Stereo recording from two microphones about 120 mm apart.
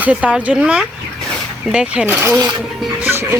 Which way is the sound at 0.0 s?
10° right (ahead or behind).